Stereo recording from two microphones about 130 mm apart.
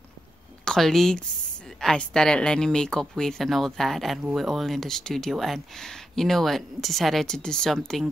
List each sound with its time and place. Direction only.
0.7 s speech: centre (ahead or behind)